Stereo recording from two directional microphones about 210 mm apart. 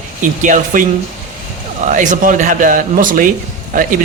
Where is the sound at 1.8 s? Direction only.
35° right (ahead or behind).